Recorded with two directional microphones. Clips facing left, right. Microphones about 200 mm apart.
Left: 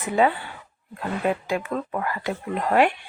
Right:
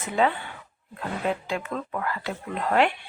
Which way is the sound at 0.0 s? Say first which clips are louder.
Left 3 dB; 15° left (ahead or behind).